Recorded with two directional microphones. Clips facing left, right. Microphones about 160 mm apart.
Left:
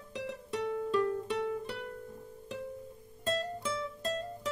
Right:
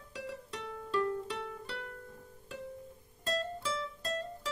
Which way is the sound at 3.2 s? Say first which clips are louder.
Left 2 dB; 20° left (ahead or behind).